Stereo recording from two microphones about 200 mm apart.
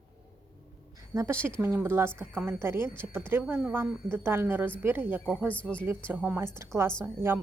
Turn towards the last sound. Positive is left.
turn(degrees=-10)  # may be behind; listen again after turning